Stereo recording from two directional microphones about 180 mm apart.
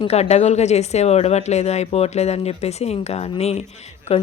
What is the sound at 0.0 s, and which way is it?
Speech, 35° left (ahead or behind).